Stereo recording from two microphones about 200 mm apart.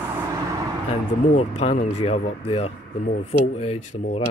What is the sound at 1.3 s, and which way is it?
Speech, 30° left (ahead or behind).